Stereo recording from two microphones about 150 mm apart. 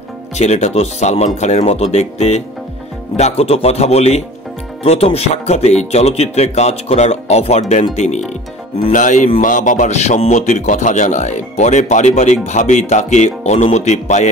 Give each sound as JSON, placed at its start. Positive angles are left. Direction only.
{"t": 0.4, "sound": "a man's voice", "side_deg": 45}
{"t": 8.9, "sound": "music", "side_deg": 60}
{"t": 9.4, "sound": "a man's voice", "side_deg": 60}